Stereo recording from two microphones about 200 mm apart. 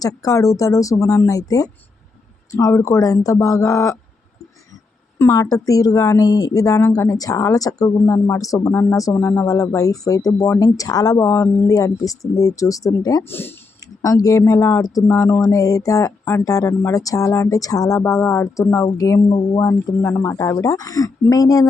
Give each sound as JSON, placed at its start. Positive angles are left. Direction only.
{"t": 0.2, "sound": "a woman's voice", "side_deg": 15}
{"t": 5.2, "sound": "a woman's voice", "side_deg": 15}